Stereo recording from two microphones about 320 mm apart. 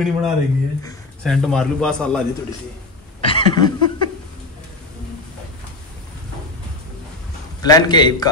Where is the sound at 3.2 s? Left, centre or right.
Centre.